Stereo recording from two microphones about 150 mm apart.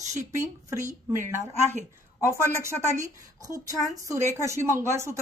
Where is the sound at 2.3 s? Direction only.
20° right (ahead or behind).